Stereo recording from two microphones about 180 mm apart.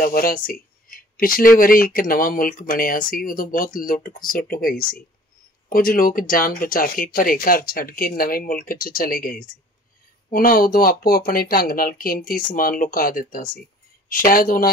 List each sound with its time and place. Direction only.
0.0 s speech: 55° left (ahead or behind)